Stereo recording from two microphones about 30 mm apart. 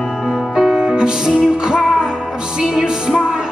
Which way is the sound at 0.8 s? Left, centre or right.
Right.